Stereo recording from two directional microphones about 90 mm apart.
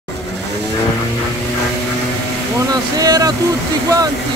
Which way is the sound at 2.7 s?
45° right (ahead or behind).